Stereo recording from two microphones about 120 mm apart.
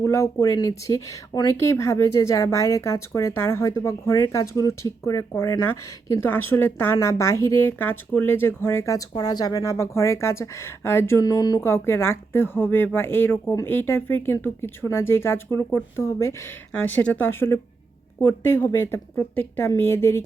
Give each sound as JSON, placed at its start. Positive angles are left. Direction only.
{"t": 0.0, "sound": "a woman's voice", "side_deg": 25}
{"t": 11.2, "sound": "speech", "side_deg": 30}
{"t": 11.6, "sound": "a woman's voice", "side_deg": 20}